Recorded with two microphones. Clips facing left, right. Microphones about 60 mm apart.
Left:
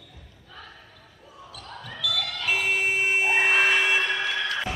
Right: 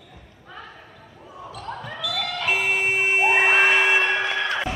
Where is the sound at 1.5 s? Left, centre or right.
Right.